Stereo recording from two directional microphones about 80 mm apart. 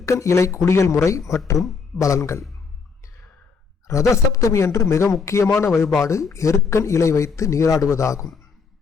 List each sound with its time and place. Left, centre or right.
0.0 s speech: left
3.8 s speech: left